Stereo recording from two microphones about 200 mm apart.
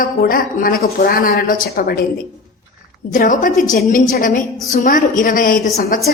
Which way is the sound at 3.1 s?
40° left (ahead or behind).